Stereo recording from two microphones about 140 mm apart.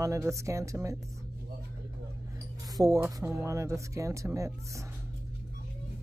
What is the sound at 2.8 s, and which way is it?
Speech, 25° right (ahead or behind).